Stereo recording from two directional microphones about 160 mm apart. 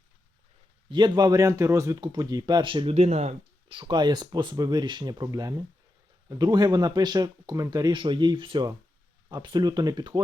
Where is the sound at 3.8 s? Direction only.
25° right (ahead or behind).